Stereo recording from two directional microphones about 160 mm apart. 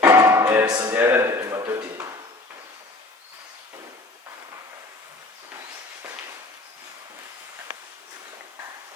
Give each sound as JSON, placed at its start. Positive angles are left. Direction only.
{"t": 0.0, "sound": "music", "side_deg": -20}
{"t": 0.7, "sound": "speech", "side_deg": -25}
{"t": 0.9, "sound": "a sound", "side_deg": -15}